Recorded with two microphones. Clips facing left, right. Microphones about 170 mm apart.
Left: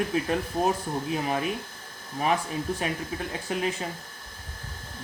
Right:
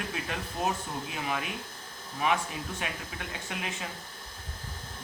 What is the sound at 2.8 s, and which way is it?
Speech, 35° left (ahead or behind).